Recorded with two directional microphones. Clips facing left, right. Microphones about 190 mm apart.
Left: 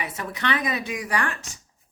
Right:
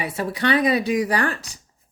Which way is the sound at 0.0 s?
30° right (ahead or behind).